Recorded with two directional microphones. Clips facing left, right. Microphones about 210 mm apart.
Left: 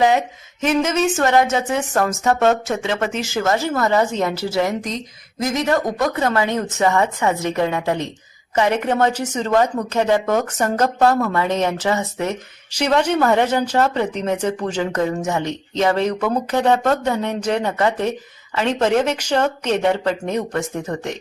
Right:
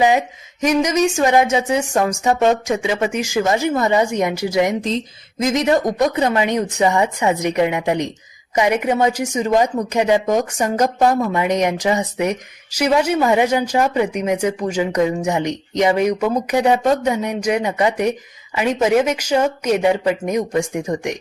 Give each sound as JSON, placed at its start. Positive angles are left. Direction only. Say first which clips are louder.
{"t": 0.6, "sound": "a woman's voice", "louder": "right 2 dB", "side_deg": -15}